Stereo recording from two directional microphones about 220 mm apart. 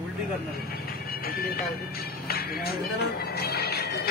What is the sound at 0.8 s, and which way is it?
Speech, 40° left (ahead or behind).